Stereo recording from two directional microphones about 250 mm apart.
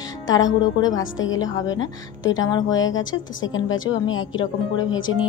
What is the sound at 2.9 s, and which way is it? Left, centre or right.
A woman's voice, left.